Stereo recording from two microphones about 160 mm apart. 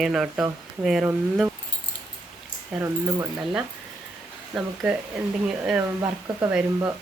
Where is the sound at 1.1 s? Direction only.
15° right (ahead or behind).